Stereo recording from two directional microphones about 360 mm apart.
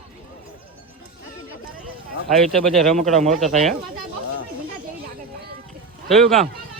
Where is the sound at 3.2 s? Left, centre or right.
Centre.